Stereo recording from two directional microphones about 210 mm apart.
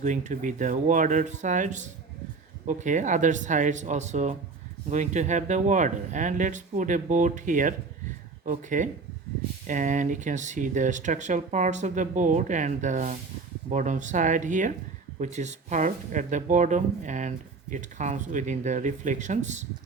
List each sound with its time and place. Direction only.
0.0 s speech: 35° right (ahead or behind)